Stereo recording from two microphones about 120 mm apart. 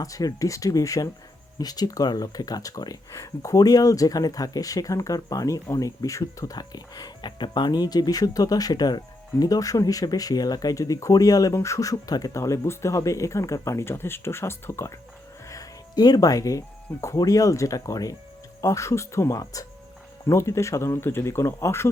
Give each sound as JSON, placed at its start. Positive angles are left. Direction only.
{"t": 0.0, "sound": "speech", "side_deg": 30}
{"t": 15.4, "sound": "speech", "side_deg": 30}